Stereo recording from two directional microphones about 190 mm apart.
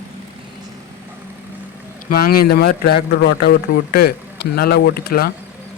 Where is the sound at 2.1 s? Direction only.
50° left (ahead or behind).